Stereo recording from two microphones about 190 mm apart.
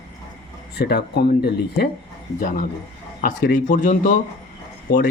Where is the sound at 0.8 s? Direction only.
60° left (ahead or behind); by 4.1 s 45° left (ahead or behind).